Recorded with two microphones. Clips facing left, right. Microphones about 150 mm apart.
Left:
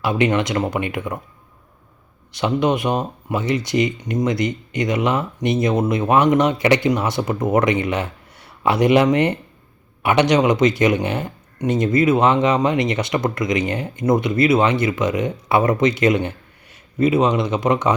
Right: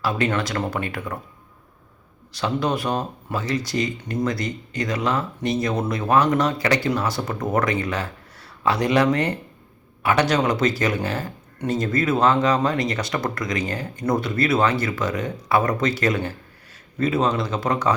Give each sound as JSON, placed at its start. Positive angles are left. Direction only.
{"t": 0.0, "sound": "speech", "side_deg": 20}
{"t": 2.3, "sound": "speech", "side_deg": 20}